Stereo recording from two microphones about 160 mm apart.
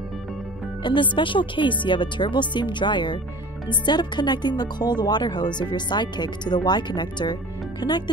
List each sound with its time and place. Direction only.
0.8 s speech: 30° left (ahead or behind)